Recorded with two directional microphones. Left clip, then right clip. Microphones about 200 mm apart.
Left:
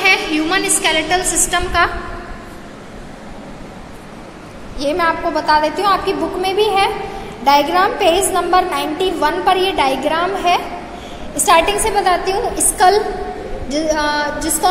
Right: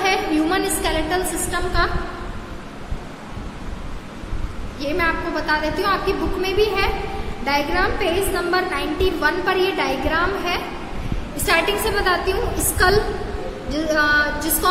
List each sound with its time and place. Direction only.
0.0 s a sound: 5° right (ahead or behind)
1.5 s a woman's voice: 30° left (ahead or behind)
4.7 s a woman's voice: 20° left (ahead or behind)